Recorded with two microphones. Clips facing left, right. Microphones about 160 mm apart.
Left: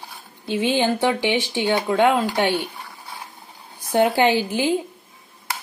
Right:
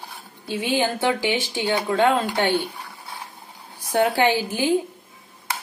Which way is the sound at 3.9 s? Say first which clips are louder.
Left 2 dB; 20° left (ahead or behind).